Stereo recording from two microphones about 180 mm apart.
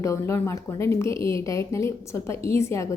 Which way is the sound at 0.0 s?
15° left (ahead or behind).